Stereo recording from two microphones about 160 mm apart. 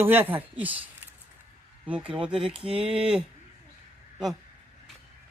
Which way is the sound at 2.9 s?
5° right (ahead or behind).